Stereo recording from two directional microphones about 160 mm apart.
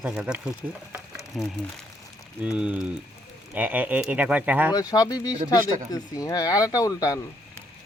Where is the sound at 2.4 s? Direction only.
5° right (ahead or behind).